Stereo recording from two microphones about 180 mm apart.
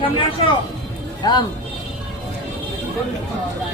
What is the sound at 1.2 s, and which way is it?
Speech, 20° left (ahead or behind).